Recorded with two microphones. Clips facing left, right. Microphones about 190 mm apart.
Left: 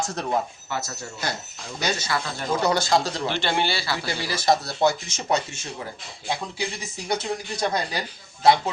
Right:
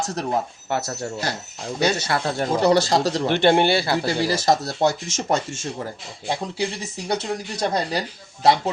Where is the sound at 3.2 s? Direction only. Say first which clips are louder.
Right 8 dB; 55° right (ahead or behind).